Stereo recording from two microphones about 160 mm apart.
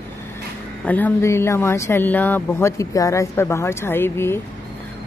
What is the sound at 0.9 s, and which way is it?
Speech, 10° left (ahead or behind).